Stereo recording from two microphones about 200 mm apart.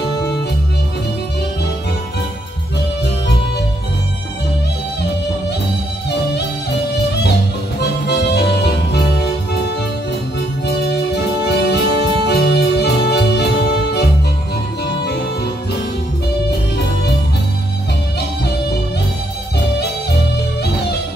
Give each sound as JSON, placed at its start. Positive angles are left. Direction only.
{"t": 8.1, "sound": "music", "side_deg": 55}
{"t": 11.4, "sound": "music", "side_deg": 55}